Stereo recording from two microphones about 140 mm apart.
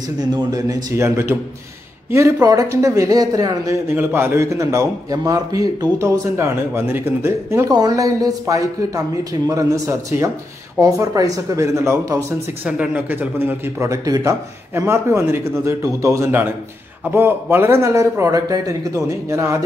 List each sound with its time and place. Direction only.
0.2 s a man's voice: 30° right (ahead or behind)
3.9 s a man's voice: 15° right (ahead or behind)
12.6 s a man's voice: 10° right (ahead or behind)